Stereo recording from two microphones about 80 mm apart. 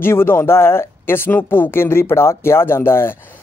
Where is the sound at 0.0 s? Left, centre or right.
Left.